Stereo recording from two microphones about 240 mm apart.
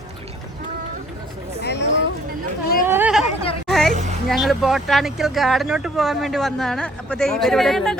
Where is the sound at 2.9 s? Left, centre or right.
Centre.